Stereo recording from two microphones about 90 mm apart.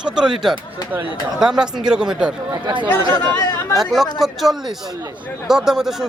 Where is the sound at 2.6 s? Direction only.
65° right (ahead or behind).